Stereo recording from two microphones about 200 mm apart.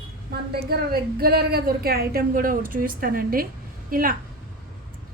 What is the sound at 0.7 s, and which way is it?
A woman's voice, 50° right (ahead or behind).